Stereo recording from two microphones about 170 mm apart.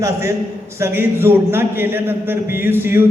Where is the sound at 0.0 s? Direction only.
15° right (ahead or behind).